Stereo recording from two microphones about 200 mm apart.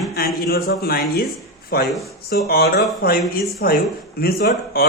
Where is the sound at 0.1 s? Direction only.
50° left (ahead or behind).